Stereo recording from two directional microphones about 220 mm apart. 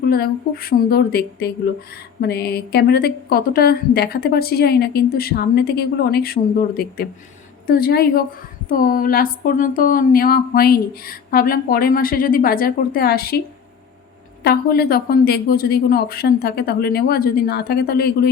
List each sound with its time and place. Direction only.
0.0 s a woman's voice: 45° left (ahead or behind)
14.4 s a woman's voice: 45° left (ahead or behind)